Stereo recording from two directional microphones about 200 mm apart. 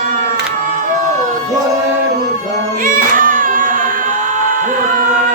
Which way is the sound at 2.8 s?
45° right (ahead or behind).